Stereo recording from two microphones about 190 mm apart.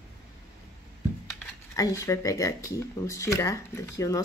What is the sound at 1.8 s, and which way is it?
Speech, 15° left (ahead or behind).